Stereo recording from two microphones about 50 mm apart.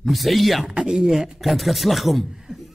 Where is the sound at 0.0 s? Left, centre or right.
Centre.